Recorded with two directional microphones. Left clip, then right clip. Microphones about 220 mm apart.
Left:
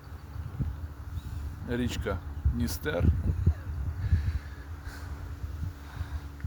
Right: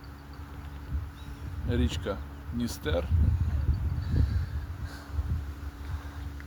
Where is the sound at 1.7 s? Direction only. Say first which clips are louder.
Even; 30° left (ahead or behind).